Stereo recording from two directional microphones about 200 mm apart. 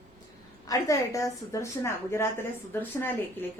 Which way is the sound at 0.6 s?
15° left (ahead or behind).